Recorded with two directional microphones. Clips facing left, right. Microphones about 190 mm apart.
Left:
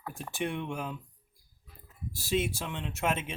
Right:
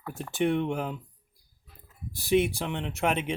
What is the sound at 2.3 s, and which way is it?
Speech, 20° right (ahead or behind).